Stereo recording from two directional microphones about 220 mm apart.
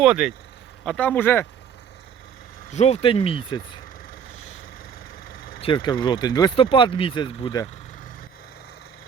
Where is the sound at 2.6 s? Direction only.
30° left (ahead or behind).